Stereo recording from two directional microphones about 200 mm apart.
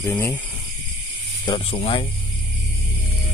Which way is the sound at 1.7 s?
30° left (ahead or behind).